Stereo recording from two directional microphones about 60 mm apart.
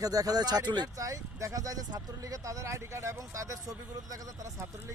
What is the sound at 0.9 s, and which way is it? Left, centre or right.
Speech, right.